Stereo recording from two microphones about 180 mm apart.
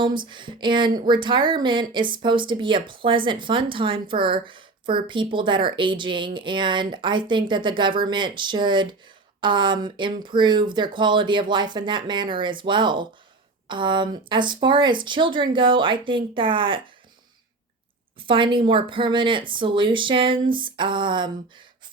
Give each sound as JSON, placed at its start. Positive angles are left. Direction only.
{"t": 0.0, "sound": "speech", "side_deg": -25}
{"t": 18.2, "sound": "speech", "side_deg": -30}